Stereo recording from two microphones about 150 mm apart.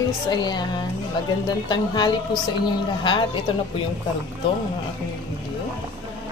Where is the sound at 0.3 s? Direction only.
30° left (ahead or behind).